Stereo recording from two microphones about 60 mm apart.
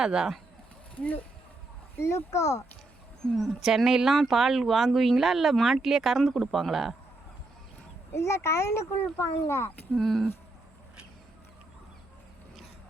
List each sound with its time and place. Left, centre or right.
0.0 s speech: centre
2.0 s speech: left
3.3 s speech: centre
8.1 s speech: left
9.9 s speech: centre